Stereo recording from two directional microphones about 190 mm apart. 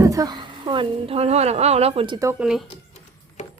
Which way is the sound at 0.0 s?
20° right (ahead or behind).